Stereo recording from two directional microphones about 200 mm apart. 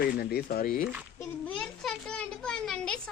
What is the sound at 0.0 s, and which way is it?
Speech, 50° left (ahead or behind).